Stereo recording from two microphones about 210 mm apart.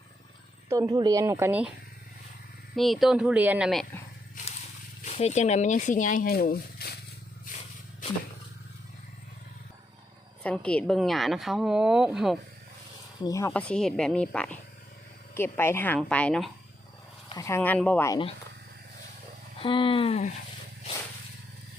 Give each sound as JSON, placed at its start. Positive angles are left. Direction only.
{"t": 0.7, "sound": "speech", "side_deg": -15}
{"t": 2.7, "sound": "a woman's voice", "side_deg": 0}
{"t": 5.0, "sound": "speech", "side_deg": 30}
{"t": 10.4, "sound": "a woman's voice", "side_deg": 5}
{"t": 13.2, "sound": "a woman's voice", "side_deg": 15}
{"t": 19.5, "sound": "speech", "side_deg": 25}